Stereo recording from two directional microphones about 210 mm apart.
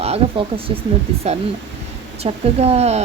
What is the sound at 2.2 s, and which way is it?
Speech, 30° right (ahead or behind).